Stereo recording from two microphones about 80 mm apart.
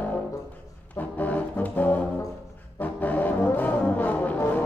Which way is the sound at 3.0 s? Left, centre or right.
Left.